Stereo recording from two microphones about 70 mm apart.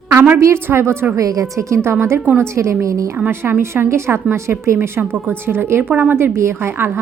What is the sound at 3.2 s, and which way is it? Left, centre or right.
A woman's voice, right.